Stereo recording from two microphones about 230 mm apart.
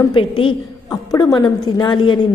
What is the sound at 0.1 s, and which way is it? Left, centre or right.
A woman's voice, left.